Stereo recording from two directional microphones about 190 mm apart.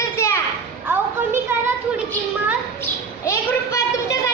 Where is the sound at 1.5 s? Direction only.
10° right (ahead or behind).